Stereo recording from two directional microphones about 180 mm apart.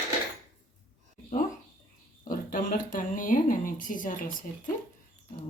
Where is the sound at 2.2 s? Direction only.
50° left (ahead or behind).